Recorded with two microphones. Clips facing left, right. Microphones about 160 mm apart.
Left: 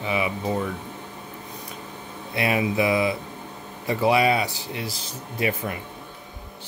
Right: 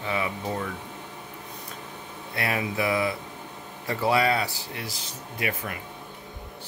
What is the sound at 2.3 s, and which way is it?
Speech, 20° left (ahead or behind).